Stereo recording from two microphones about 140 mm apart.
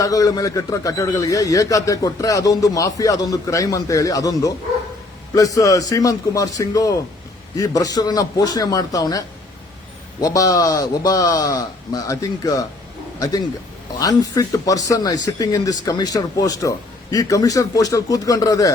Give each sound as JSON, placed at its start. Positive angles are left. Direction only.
{"t": 0.0, "sound": "a man's voice", "side_deg": 25}